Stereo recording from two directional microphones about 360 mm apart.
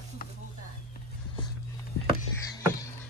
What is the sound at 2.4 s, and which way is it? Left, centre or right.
Music, centre.